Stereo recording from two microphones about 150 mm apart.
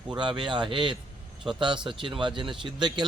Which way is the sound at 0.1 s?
35° right (ahead or behind).